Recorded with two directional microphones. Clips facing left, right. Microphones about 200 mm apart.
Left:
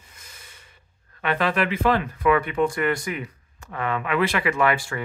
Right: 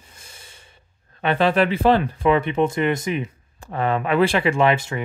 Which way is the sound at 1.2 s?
30° right (ahead or behind).